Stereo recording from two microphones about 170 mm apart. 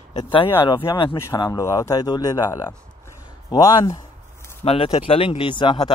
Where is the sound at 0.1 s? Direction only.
30° left (ahead or behind).